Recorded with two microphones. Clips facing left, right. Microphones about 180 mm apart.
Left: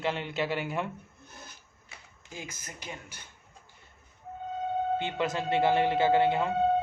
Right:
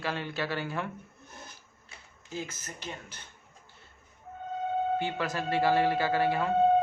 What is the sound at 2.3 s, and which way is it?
Speech, 15° left (ahead or behind).